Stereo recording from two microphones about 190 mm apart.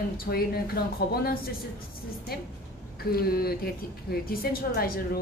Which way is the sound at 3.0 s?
50° left (ahead or behind).